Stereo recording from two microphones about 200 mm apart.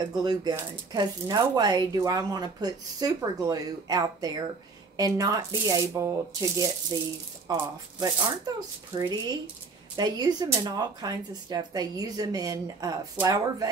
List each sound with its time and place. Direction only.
0.2 s speech: 20° right (ahead or behind)